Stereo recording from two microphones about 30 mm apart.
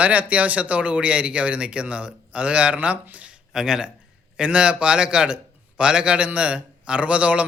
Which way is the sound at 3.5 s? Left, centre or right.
Right.